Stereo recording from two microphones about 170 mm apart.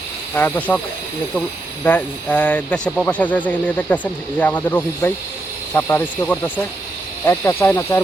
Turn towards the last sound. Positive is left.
turn(degrees=15)  # may be behind; listen again after turning